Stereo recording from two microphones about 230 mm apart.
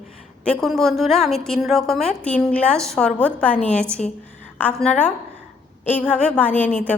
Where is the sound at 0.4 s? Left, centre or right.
Centre.